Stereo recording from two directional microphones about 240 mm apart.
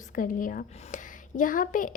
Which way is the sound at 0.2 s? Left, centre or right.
Left.